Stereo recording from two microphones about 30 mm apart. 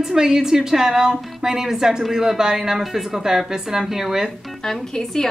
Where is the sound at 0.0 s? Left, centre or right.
Centre.